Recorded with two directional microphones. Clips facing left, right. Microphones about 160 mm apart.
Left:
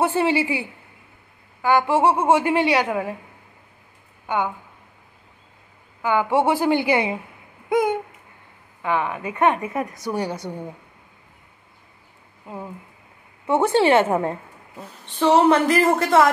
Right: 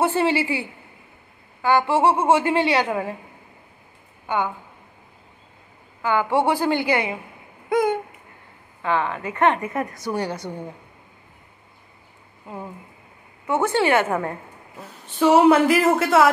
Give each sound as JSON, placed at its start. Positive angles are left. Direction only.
{"t": 0.0, "sound": "a woman's voice", "side_deg": 15}
{"t": 6.0, "sound": "a woman's voice", "side_deg": 15}
{"t": 13.5, "sound": "a woman's voice", "side_deg": 25}
{"t": 14.8, "sound": "speech", "side_deg": -10}